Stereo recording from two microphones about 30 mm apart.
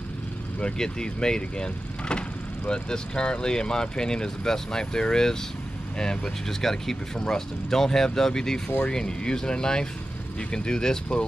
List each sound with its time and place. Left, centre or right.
0.7 s speech: left
6.6 s speech: centre